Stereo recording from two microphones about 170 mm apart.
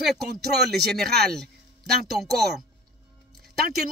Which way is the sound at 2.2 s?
Centre (ahead or behind).